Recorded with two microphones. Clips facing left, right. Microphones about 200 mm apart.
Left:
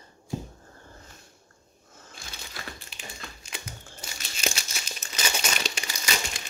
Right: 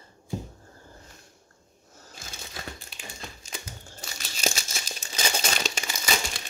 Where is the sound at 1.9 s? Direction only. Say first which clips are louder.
Even; 40° right (ahead or behind).